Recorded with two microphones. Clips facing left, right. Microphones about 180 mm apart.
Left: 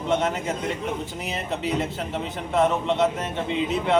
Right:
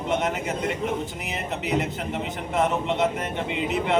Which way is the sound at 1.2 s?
20° right (ahead or behind).